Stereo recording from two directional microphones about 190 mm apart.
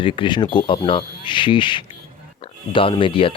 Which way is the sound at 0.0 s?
25° left (ahead or behind).